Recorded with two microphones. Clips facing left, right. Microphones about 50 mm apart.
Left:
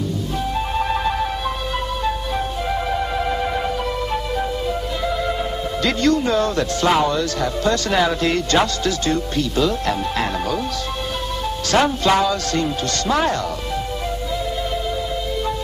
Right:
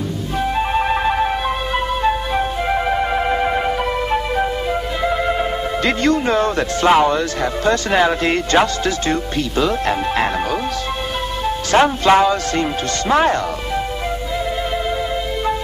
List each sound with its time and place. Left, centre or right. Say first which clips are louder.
0.4 s music: right 5 dB; right
11.7 s speech: right 4 dB; right